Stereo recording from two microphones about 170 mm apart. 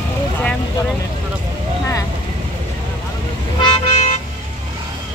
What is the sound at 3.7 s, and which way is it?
Vehicle, 40° left (ahead or behind).